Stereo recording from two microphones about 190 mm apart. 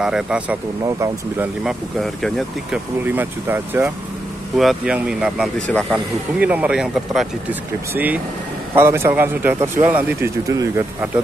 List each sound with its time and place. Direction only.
0.0 s speech: 5° right (ahead or behind)
0.8 s a man's voice: 15° right (ahead or behind)
1.6 s speech: centre (ahead or behind)
3.1 s a man's voice: 10° right (ahead or behind)
6.4 s a man's voice: 10° right (ahead or behind)